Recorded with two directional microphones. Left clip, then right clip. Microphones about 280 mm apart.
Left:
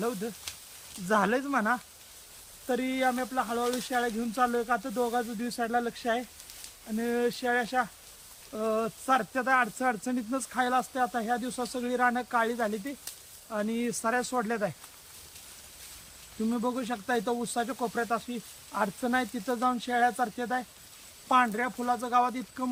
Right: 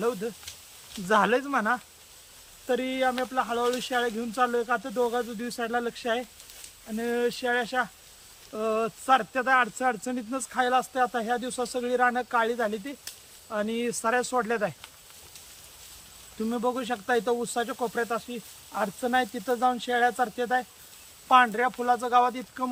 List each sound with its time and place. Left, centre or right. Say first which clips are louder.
1.0 s speech: right 4 dB; centre
16.5 s speech: right 4 dB; centre